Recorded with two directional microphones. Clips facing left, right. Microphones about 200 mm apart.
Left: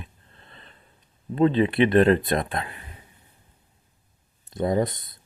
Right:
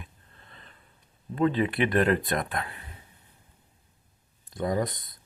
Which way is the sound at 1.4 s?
25° left (ahead or behind).